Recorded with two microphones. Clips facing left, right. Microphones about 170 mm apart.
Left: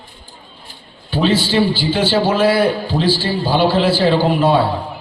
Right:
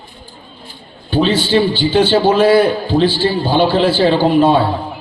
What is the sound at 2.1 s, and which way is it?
A man's voice, 25° right (ahead or behind).